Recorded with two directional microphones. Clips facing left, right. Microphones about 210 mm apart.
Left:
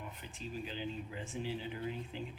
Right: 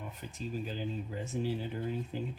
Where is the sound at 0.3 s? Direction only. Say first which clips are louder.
Right 5 dB; 40° right (ahead or behind).